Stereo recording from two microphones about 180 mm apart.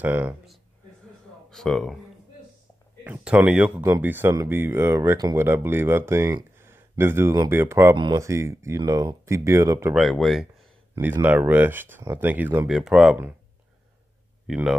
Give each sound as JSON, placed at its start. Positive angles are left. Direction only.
{"t": 0.0, "sound": "speech", "side_deg": -10}
{"t": 1.5, "sound": "speech", "side_deg": 0}
{"t": 3.0, "sound": "speech", "side_deg": -10}
{"t": 9.9, "sound": "speech", "side_deg": 0}
{"t": 14.5, "sound": "speech", "side_deg": 0}